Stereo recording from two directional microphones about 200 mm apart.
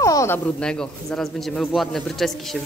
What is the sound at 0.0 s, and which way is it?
Speech, 15° left (ahead or behind).